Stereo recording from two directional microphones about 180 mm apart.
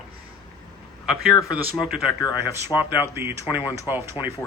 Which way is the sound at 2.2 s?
20° left (ahead or behind).